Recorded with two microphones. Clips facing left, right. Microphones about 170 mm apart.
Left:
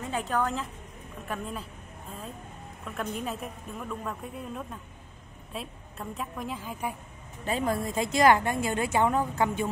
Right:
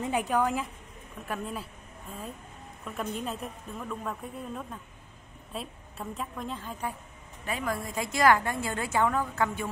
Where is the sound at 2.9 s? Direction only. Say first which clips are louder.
Even; centre (ahead or behind).